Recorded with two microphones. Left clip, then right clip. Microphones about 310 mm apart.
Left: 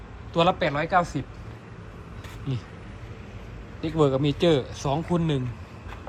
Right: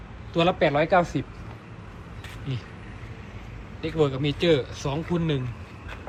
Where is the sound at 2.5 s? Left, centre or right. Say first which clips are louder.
Left 2 dB; centre.